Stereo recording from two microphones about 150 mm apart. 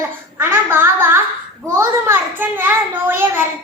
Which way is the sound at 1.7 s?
15° right (ahead or behind).